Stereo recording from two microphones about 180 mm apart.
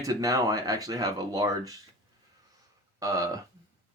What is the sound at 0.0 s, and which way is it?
Speech, 20° right (ahead or behind).